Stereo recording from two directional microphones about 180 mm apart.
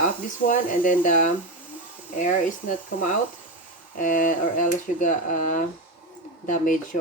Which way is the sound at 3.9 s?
50° left (ahead or behind).